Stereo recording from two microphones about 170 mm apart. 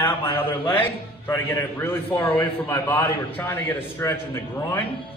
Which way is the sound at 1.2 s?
15° left (ahead or behind).